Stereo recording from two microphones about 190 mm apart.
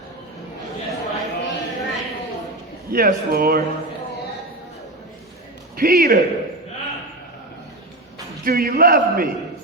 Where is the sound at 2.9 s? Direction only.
50° right (ahead or behind).